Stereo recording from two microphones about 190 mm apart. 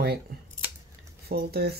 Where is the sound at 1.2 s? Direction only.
55° right (ahead or behind).